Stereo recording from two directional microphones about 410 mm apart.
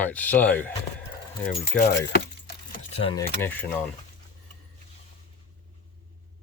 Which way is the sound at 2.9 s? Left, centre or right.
Centre.